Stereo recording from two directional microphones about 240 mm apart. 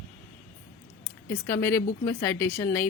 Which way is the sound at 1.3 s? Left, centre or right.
Centre.